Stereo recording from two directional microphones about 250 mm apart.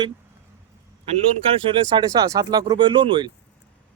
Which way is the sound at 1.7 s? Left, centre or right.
Centre.